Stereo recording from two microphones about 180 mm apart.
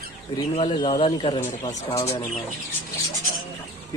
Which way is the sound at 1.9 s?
20° left (ahead or behind).